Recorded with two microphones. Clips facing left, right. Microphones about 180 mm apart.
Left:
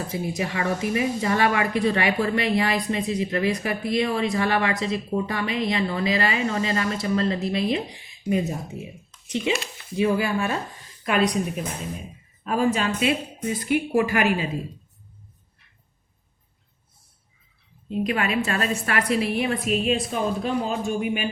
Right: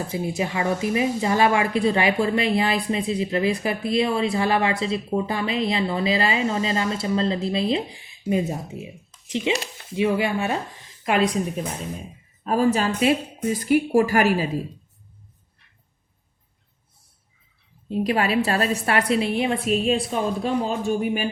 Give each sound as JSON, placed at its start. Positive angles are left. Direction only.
{"t": 0.1, "sound": "speech", "side_deg": -25}
{"t": 9.9, "sound": "speech", "side_deg": -25}
{"t": 12.5, "sound": "a woman's voice", "side_deg": -40}
{"t": 17.8, "sound": "a woman's voice", "side_deg": -35}